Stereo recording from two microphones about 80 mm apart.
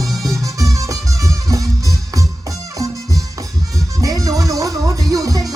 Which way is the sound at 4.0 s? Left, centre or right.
Right.